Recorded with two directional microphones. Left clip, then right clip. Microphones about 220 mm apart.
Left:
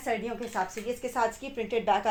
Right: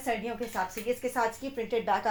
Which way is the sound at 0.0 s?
35° left (ahead or behind).